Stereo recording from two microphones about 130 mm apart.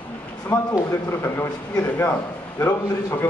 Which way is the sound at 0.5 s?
20° left (ahead or behind).